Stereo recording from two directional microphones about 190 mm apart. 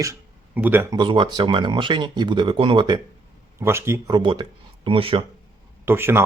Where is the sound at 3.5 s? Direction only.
15° right (ahead or behind); by 5.2 s 30° right (ahead or behind).